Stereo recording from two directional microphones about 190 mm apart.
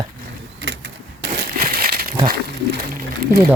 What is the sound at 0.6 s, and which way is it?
Typewriter, 70° right (ahead or behind).